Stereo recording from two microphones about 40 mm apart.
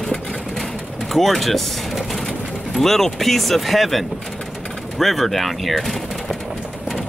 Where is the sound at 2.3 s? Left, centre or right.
Centre.